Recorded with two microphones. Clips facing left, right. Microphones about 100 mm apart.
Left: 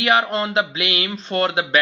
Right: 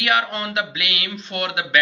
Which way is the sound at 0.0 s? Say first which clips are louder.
Left 3 dB; 30° left (ahead or behind).